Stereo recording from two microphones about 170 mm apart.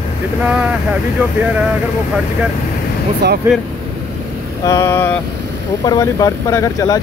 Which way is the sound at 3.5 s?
10° right (ahead or behind).